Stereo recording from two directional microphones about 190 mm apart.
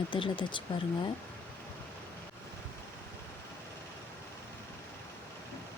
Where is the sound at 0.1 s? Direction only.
25° left (ahead or behind).